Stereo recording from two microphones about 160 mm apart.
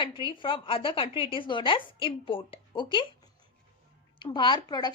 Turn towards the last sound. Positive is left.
turn(degrees=25)  # may be behind; listen again after turning